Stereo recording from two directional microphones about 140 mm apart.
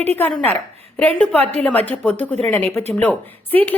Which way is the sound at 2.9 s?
10° left (ahead or behind).